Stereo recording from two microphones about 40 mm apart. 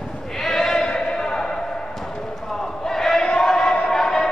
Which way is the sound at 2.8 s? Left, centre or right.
Centre.